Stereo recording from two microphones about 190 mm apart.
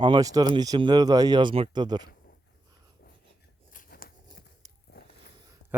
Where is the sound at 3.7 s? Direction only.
45° left (ahead or behind).